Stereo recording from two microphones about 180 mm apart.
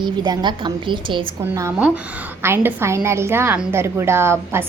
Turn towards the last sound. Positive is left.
turn(degrees=-15)  # may be behind; listen again after turning